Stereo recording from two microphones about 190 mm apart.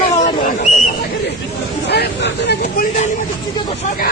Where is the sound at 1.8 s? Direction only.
60° left (ahead or behind).